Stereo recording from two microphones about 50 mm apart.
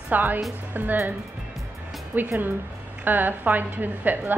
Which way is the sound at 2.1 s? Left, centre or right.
Right.